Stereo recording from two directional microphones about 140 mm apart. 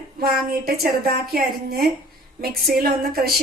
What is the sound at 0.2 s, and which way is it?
A woman's voice, 90° right.